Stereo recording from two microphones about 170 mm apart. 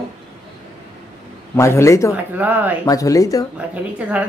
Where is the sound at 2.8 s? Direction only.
20° left (ahead or behind).